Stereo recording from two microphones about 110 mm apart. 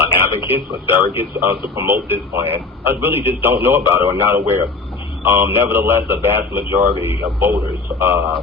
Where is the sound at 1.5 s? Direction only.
20° right (ahead or behind).